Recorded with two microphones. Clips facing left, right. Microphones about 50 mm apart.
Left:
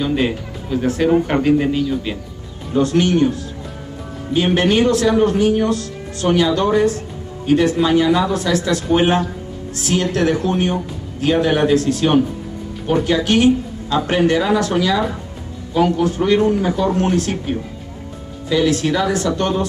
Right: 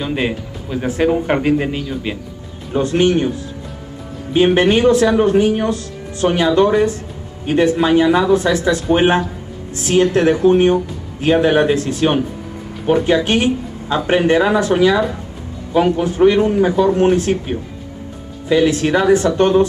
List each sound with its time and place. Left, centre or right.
0.0 s a man's voice: centre
4.6 s speech: right